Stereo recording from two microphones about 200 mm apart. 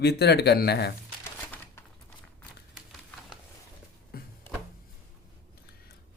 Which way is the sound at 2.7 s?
Centre (ahead or behind).